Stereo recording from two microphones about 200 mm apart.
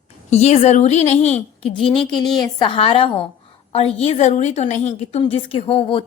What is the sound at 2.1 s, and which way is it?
A woman's voice, 20° left (ahead or behind).